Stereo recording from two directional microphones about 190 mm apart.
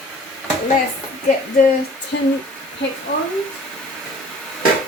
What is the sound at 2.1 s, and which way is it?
Speech, 80° left.